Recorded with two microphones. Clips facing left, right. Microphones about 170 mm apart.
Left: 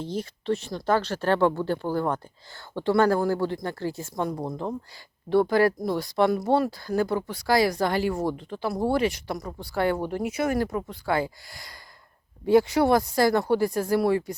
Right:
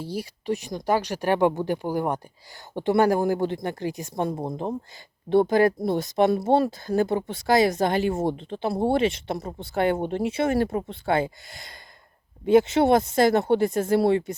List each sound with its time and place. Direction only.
0.0 s speech: 10° right (ahead or behind)